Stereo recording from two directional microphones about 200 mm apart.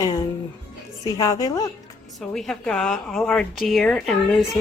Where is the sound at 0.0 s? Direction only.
15° left (ahead or behind).